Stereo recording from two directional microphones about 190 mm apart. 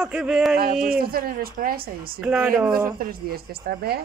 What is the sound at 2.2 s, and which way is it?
Speech, 5° right (ahead or behind).